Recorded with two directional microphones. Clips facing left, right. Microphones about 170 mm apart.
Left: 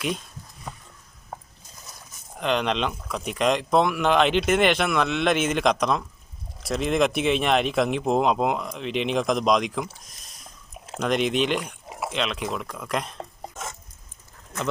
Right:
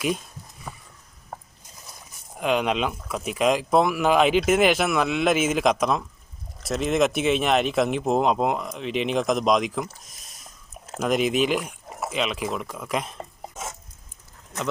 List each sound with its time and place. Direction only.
2.3 s speech: 5° right (ahead or behind)